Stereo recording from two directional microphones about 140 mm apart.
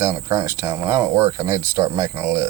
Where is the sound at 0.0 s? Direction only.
25° right (ahead or behind).